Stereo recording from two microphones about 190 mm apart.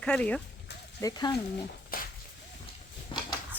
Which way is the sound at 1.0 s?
20° left (ahead or behind).